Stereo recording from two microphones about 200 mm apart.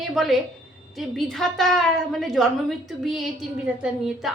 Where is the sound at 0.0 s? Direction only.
Centre (ahead or behind).